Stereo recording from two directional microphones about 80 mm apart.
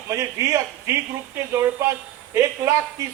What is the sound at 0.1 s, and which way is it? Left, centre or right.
Speech, right.